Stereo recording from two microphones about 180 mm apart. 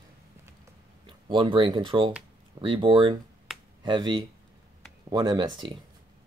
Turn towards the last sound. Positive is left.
turn(degrees=-25)  # may be behind; listen again after turning